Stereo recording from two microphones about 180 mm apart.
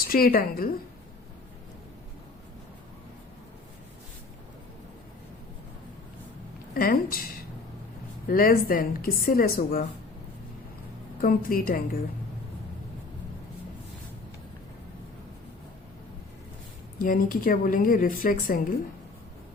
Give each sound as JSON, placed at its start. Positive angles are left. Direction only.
{"t": 0.1, "sound": "a woman's voice", "side_deg": 55}
{"t": 6.7, "sound": "speech", "side_deg": 55}
{"t": 8.3, "sound": "speech", "side_deg": 55}
{"t": 11.2, "sound": "speech", "side_deg": 50}
{"t": 17.0, "sound": "speech", "side_deg": 50}